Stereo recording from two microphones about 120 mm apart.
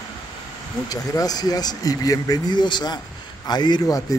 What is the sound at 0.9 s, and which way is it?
Speech, 30° left (ahead or behind).